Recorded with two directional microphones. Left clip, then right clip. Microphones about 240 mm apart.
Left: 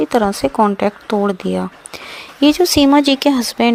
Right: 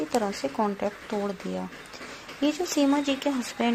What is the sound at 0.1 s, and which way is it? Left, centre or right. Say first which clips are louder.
Speech: left 12 dB; left.